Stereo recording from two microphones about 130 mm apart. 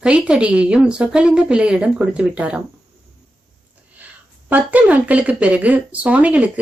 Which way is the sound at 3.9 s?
10° right (ahead or behind).